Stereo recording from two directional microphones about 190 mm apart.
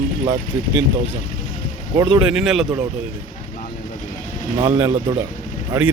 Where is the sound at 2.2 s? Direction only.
5° right (ahead or behind).